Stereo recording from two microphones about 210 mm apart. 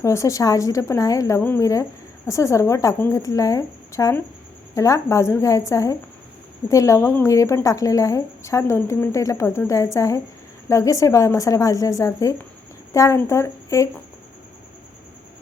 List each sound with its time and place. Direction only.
0.0 s a woman's voice: 15° left (ahead or behind)